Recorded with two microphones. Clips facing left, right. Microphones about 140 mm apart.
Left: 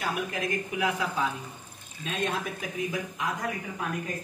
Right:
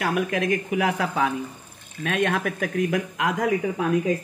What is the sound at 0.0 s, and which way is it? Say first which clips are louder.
Speech: right 7 dB; 70° right (ahead or behind).